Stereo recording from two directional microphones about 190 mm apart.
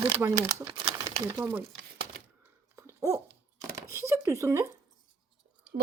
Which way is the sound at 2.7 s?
15° right (ahead or behind).